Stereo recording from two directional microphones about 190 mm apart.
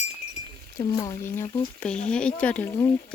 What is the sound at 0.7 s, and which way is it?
Speech, 20° left (ahead or behind).